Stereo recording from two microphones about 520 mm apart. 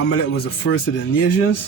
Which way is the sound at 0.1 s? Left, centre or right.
Left.